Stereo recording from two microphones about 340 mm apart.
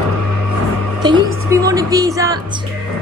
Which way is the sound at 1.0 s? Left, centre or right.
Centre.